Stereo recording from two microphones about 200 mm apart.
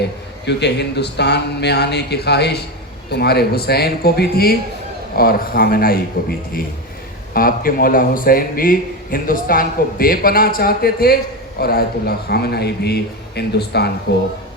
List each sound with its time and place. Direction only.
0.4 s a man's voice: 55° left (ahead or behind)
7.3 s a man's voice: 45° left (ahead or behind)